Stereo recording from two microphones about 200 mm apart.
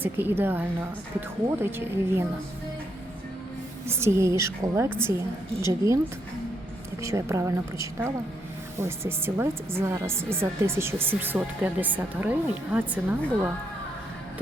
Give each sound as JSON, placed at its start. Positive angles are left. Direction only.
{"t": 0.0, "sound": "a woman's voice", "side_deg": -10}
{"t": 3.8, "sound": "a woman's voice", "side_deg": -10}
{"t": 7.0, "sound": "a woman's voice", "side_deg": -15}